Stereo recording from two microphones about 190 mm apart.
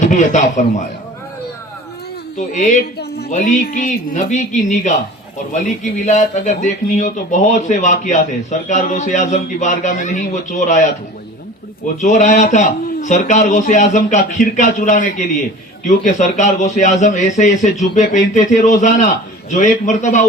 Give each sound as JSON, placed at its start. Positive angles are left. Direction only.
{"t": 0.0, "sound": "a man's voice", "side_deg": 40}
{"t": 2.5, "sound": "speech", "side_deg": 40}
{"t": 11.9, "sound": "speech", "side_deg": 40}